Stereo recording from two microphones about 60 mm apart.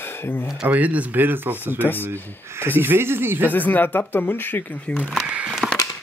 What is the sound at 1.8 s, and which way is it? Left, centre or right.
Speech, left.